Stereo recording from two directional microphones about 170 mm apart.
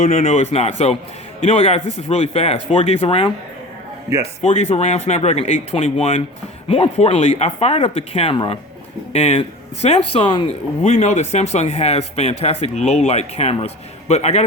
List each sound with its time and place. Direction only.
0.0 s speech: 40° left (ahead or behind)
4.4 s speech: 40° left (ahead or behind)
10.8 s speech: 40° left (ahead or behind)